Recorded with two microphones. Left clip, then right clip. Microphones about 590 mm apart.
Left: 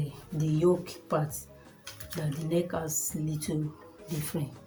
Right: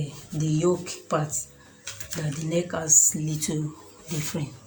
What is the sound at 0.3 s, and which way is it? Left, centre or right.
Speech, left.